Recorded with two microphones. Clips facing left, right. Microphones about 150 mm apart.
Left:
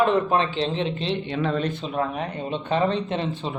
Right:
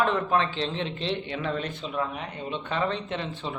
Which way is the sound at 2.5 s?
25° left (ahead or behind).